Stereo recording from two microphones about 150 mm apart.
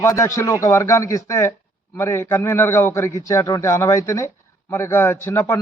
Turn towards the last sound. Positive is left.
turn(degrees=15)  # may be behind; listen again after turning